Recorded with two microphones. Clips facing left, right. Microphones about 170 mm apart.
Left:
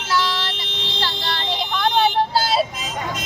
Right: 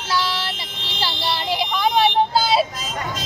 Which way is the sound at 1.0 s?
10° right (ahead or behind).